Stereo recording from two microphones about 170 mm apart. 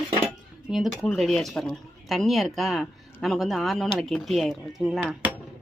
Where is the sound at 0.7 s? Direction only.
Centre (ahead or behind).